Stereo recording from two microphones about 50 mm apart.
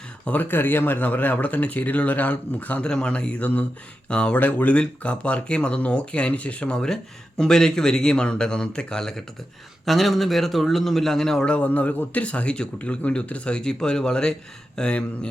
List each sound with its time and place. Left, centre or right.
0.3 s speech: left
2.8 s speech: centre
4.4 s speech: left
4.8 s a man's voice: left; by 11.4 s centre
11.4 s speech: left
13.6 s speech: centre